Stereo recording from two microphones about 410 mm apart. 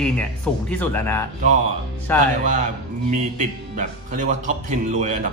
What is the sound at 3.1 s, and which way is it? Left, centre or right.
A man's voice, centre.